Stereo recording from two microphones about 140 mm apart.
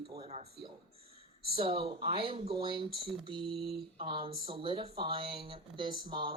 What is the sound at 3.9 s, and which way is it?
Speech, 35° right (ahead or behind).